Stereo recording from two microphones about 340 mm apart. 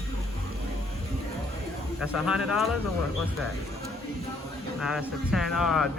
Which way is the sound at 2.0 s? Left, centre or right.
Centre.